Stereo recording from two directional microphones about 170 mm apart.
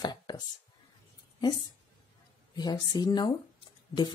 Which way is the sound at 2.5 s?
25° left (ahead or behind).